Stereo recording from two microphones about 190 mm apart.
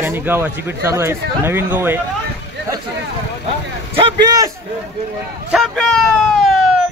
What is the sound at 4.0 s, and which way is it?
Speech, 25° right (ahead or behind).